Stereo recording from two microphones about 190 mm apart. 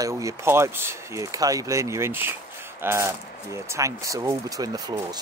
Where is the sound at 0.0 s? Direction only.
15° right (ahead or behind).